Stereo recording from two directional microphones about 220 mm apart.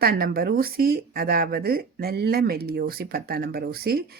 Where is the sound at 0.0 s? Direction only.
45° right (ahead or behind).